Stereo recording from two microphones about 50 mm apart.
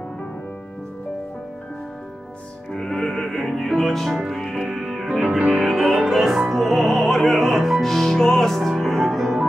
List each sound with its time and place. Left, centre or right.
2.7 s music: centre
4.1 s speech: centre
4.4 s music: centre